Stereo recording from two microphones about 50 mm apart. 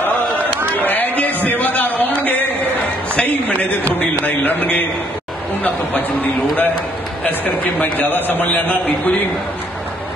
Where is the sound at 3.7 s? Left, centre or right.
Left.